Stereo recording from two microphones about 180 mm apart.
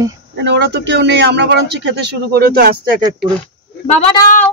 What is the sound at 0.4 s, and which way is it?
A man's voice, 70° right (ahead or behind).